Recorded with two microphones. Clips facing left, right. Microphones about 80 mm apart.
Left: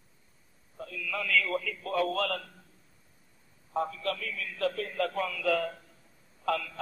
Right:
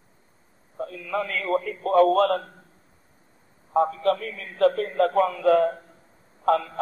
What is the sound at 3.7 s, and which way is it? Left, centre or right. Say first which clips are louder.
A man's voice: right 10 dB; right.